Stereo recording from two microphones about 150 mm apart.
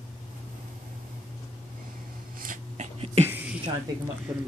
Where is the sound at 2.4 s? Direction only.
65° right (ahead or behind).